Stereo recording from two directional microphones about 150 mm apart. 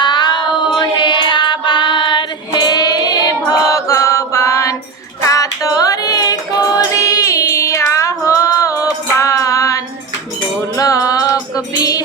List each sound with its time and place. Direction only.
0.0 s child singing: 30° left (ahead or behind)
0.8 s music: 30° left (ahead or behind)